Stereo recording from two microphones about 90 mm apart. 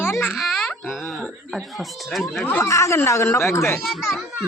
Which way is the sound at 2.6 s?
35° left (ahead or behind).